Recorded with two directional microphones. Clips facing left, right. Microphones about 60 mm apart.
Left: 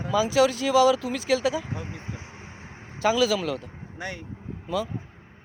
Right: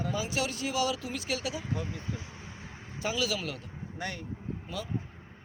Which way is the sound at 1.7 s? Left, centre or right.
Left.